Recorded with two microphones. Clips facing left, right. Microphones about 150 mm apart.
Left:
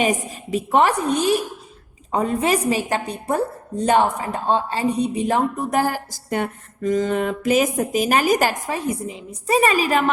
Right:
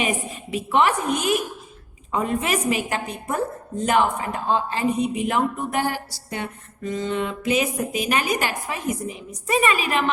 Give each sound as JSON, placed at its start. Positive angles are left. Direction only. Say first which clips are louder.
{"t": 0.0, "sound": "a woman's voice", "louder": "left 4 dB", "side_deg": 40}